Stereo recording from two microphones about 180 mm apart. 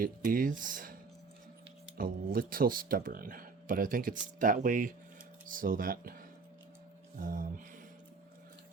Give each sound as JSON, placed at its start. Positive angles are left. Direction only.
{"t": 0.0, "sound": "speech", "side_deg": -50}
{"t": 2.0, "sound": "speech", "side_deg": -50}